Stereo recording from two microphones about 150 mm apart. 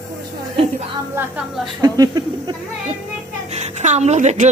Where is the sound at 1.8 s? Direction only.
25° right (ahead or behind).